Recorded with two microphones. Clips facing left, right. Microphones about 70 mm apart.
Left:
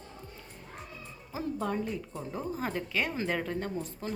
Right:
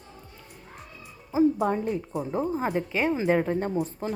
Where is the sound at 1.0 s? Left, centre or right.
Centre.